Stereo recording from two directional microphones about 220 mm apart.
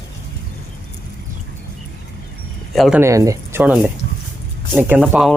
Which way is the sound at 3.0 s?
15° right (ahead or behind).